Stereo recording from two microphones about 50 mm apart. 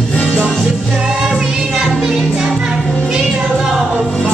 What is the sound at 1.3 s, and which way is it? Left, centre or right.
Music, centre.